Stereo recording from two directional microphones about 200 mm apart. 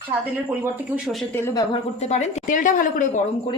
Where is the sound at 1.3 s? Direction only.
15° left (ahead or behind).